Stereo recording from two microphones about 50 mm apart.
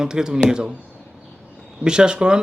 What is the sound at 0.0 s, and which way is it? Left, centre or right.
Speech, centre.